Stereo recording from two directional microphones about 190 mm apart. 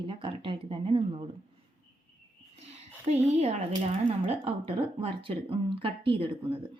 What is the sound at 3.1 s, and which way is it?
Speech, 35° right (ahead or behind).